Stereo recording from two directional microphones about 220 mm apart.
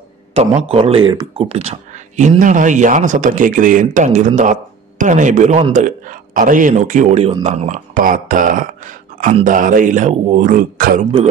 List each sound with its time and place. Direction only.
0.3 s a man's voice: 25° right (ahead or behind)